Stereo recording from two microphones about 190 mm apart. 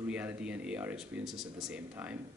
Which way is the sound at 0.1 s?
10° right (ahead or behind).